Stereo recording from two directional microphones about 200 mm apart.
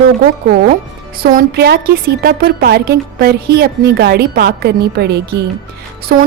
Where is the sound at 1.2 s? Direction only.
50° right (ahead or behind).